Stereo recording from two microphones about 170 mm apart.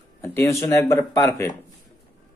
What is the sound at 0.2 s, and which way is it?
Speech, 15° left (ahead or behind).